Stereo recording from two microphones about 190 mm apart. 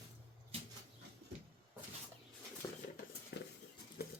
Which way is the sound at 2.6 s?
25° left (ahead or behind).